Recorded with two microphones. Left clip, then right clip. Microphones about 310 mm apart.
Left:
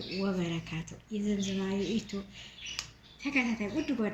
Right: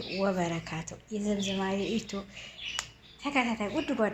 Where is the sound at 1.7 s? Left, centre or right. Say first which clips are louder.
Right 2 dB; centre.